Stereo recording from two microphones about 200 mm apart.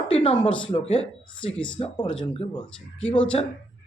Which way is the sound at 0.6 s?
30° left (ahead or behind).